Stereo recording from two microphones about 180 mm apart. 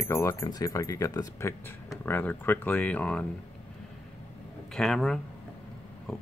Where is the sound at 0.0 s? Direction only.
15° left (ahead or behind).